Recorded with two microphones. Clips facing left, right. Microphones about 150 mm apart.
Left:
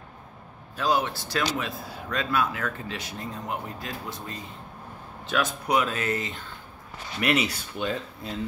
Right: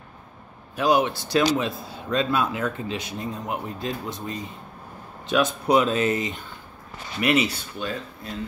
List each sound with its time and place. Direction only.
0.7 s a man's voice: 15° right (ahead or behind)
7.2 s a man's voice: centre (ahead or behind)
7.7 s speech: 20° left (ahead or behind)